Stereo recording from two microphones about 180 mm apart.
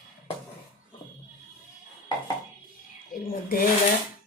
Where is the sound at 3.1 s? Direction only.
50° left (ahead or behind).